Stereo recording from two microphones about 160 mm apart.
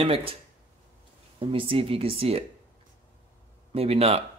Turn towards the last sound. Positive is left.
turn(degrees=-40)  # may be behind; listen again after turning